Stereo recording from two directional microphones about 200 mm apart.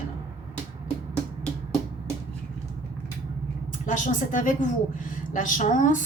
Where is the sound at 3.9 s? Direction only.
40° left (ahead or behind).